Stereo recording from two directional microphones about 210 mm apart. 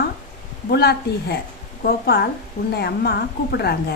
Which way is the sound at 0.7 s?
50° left (ahead or behind).